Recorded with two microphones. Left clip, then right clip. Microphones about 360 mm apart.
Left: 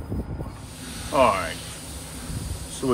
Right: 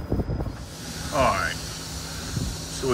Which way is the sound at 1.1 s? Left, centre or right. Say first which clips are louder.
Left 3 dB; centre.